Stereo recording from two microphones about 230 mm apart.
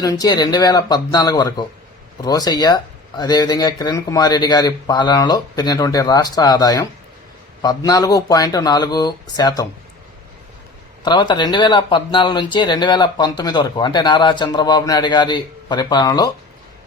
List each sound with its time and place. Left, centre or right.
0.0 s speech: centre
11.0 s speech: centre